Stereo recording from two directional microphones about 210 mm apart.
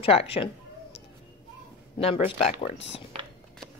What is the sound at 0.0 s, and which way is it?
Speech, 25° left (ahead or behind).